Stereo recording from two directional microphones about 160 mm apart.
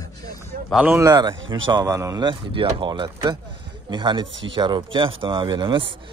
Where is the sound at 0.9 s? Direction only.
20° right (ahead or behind).